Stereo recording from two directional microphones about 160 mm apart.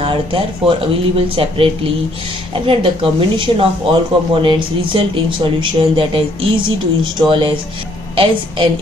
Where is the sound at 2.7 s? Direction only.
35° right (ahead or behind).